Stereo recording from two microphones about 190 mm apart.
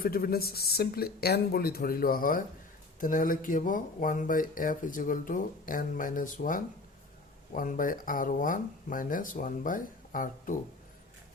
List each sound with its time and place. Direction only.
0.0 s speech: 50° left (ahead or behind)